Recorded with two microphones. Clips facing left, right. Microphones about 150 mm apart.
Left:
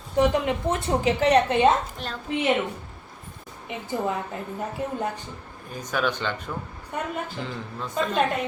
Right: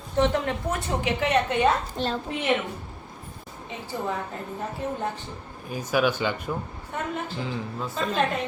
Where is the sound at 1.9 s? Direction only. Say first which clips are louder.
Right 7 dB; 30° right (ahead or behind).